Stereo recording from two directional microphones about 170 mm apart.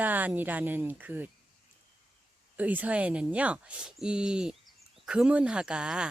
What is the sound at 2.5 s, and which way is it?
Speech, 10° right (ahead or behind).